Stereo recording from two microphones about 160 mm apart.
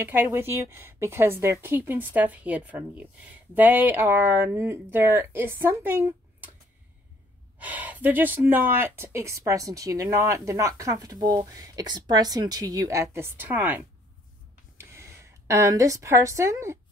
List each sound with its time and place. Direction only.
0.0 s a woman's voice: 15° right (ahead or behind)
7.5 s speech: 10° right (ahead or behind)